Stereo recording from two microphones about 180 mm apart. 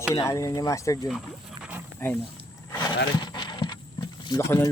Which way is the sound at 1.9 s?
10° left (ahead or behind).